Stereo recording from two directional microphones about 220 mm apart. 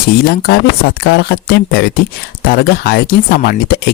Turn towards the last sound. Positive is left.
turn(degrees=45)  # may be behind; listen again after turning